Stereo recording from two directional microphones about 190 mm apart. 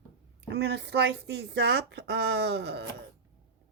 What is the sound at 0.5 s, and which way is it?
Speech, 60° right (ahead or behind).